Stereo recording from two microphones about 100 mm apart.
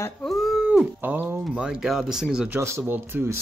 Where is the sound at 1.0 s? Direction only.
20° right (ahead or behind).